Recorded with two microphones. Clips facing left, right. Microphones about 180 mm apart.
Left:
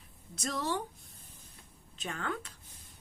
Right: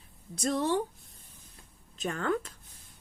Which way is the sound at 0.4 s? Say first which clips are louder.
Right 6 dB; 25° right (ahead or behind).